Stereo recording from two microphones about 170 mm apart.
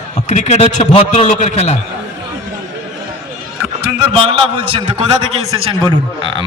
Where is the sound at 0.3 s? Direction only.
45° left (ahead or behind).